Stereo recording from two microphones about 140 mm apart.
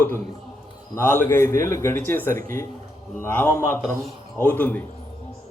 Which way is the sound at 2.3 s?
70° right (ahead or behind).